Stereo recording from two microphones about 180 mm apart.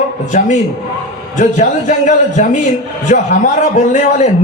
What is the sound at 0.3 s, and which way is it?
A man's voice, 45° left (ahead or behind).